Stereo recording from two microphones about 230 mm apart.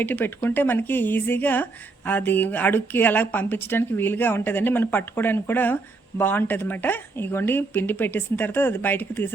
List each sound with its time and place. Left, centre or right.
0.0 s speech: centre